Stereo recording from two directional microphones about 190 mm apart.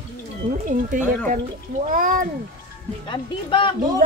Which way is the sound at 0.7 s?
40° right (ahead or behind).